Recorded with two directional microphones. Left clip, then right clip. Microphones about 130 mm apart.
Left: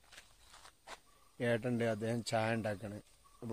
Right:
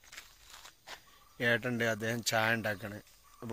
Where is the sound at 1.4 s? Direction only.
10° right (ahead or behind).